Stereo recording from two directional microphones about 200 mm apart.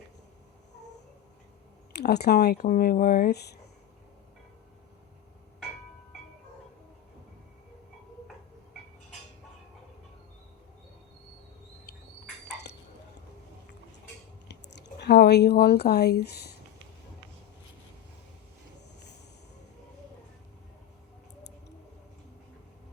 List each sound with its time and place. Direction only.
1.9 s speech: 55° left (ahead or behind)
14.4 s chewing: 60° left (ahead or behind)
15.0 s speech: 55° left (ahead or behind)